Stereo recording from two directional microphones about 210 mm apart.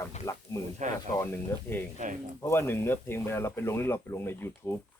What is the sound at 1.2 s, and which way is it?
Speech, 10° left (ahead or behind).